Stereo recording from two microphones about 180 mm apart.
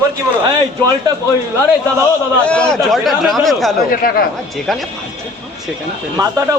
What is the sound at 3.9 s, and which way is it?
Speech, 55° left (ahead or behind).